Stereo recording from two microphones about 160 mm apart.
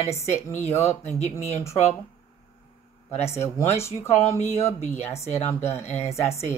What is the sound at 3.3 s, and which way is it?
Speech, 15° left (ahead or behind).